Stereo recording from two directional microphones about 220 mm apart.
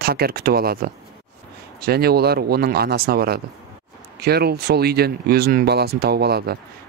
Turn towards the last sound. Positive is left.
turn(degrees=-45)  # may be behind; listen again after turning